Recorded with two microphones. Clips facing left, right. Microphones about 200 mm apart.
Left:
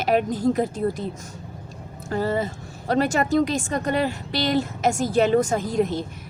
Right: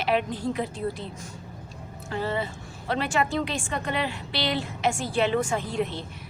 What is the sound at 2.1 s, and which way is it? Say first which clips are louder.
A woman's voice: left 5 dB; 40° left (ahead or behind).